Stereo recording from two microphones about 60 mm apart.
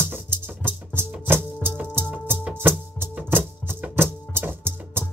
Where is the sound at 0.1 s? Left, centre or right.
Right.